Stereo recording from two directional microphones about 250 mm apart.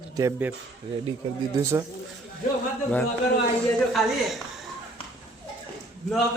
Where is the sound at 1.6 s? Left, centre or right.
Centre.